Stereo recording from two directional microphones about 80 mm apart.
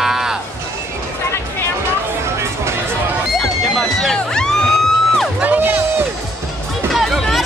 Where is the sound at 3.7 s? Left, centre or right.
Centre.